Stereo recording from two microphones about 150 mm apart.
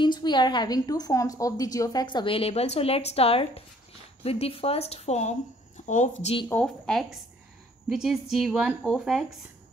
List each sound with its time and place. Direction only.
0.0 s a woman's voice: 30° left (ahead or behind); by 6.3 s 55° left (ahead or behind)
6.5 s a woman's voice: 5° left (ahead or behind)